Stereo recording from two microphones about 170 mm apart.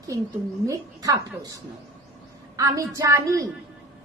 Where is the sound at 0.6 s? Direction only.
20° right (ahead or behind).